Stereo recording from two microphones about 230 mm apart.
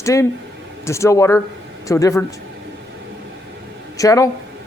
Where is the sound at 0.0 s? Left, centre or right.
Centre.